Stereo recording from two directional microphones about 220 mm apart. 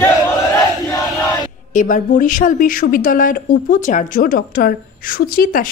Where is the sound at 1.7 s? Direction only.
35° left (ahead or behind).